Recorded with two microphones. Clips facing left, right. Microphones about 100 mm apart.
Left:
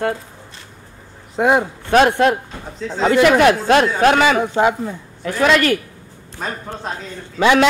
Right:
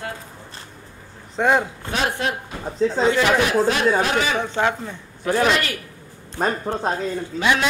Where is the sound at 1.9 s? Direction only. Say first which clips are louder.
Left 11 dB; 65° left (ahead or behind).